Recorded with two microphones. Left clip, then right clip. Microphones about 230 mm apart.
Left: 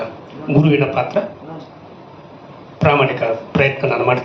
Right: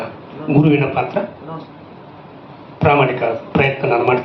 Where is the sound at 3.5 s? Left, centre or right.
Left.